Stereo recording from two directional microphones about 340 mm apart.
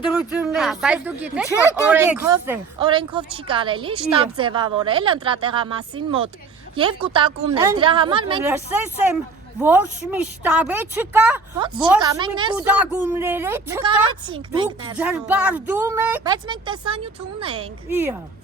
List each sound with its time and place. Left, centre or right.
0.1 s speech: centre
9.6 s speech: centre